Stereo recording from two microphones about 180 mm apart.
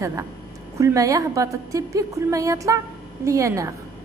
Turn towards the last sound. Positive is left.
turn(degrees=-15)  # may be behind; listen again after turning